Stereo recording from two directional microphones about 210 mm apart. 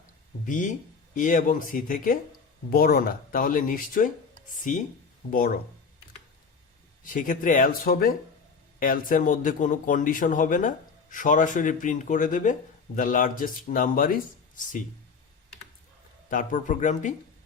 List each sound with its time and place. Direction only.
0.4 s speech: 35° left (ahead or behind)
5.3 s speech: 45° left (ahead or behind)
7.0 s speech: 40° left (ahead or behind)
16.3 s speech: 40° left (ahead or behind)